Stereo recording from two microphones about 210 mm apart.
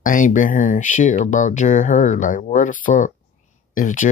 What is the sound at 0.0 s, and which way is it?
Speech, 40° left (ahead or behind).